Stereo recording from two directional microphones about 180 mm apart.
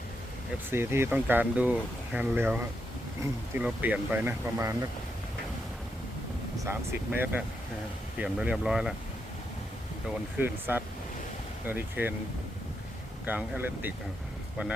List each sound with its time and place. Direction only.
0.7 s speech: 15° right (ahead or behind)
6.6 s speech: 15° right (ahead or behind)
10.3 s speech: 10° right (ahead or behind)
13.2 s speech: 10° right (ahead or behind)